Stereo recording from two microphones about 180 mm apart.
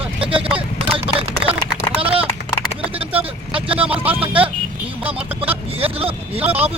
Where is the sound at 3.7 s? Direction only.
10° right (ahead or behind).